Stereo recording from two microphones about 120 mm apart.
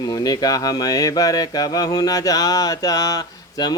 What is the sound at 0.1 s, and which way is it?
Speech, 30° left (ahead or behind).